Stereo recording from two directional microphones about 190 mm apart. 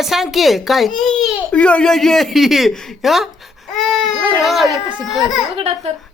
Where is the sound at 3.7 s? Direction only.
Centre (ahead or behind).